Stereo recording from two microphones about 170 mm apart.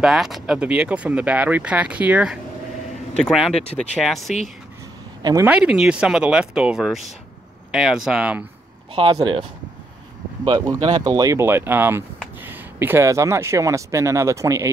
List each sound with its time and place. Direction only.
0.0 s speech: centre (ahead or behind)
3.2 s speech: 5° left (ahead or behind)
5.2 s speech: 20° right (ahead or behind)
5.5 s speech: 5° right (ahead or behind)
8.9 s speech: 30° right (ahead or behind)